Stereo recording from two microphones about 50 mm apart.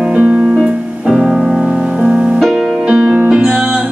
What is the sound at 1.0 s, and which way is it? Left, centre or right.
Music, centre.